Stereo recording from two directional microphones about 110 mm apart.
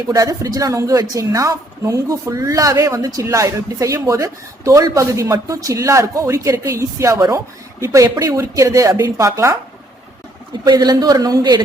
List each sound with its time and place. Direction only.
0.1 s a woman's voice: 35° right (ahead or behind)
10.6 s a man's voice: 35° right (ahead or behind)